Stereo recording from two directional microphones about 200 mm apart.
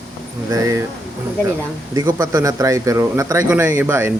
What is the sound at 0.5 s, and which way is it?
Speech, 15° right (ahead or behind).